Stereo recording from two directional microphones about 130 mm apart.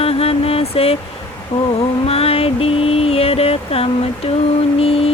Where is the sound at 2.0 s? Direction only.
50° left (ahead or behind).